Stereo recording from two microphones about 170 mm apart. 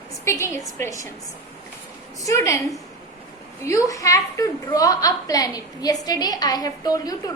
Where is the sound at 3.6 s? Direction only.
20° left (ahead or behind).